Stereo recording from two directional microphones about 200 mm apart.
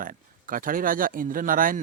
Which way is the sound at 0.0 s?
45° right (ahead or behind).